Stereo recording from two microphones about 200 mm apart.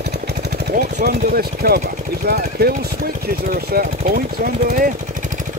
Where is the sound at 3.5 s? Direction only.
45° right (ahead or behind).